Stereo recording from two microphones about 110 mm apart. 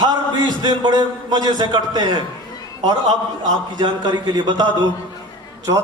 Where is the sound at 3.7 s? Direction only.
40° right (ahead or behind).